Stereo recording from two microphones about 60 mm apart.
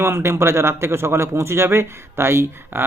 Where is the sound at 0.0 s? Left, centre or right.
Right.